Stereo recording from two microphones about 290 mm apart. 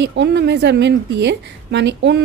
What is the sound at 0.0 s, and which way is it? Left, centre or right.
A woman's voice, right.